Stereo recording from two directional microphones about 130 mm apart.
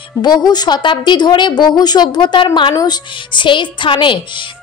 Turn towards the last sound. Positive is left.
turn(degrees=40)  # may be behind; listen again after turning